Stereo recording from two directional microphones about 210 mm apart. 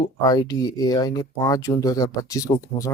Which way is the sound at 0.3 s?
20° left (ahead or behind).